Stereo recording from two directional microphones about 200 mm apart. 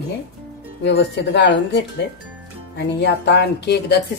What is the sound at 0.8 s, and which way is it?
Speech, 60° left (ahead or behind).